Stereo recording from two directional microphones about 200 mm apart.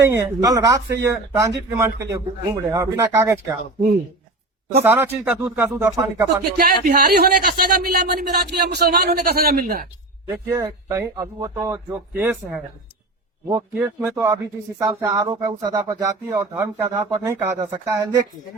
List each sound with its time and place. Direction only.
0.1 s speech: 15° right (ahead or behind)
4.8 s speech: 10° right (ahead or behind)
6.6 s speech: 50° right (ahead or behind)
10.2 s speech: 15° right (ahead or behind)